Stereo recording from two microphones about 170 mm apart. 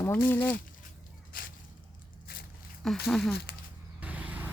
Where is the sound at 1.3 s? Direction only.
60° left (ahead or behind).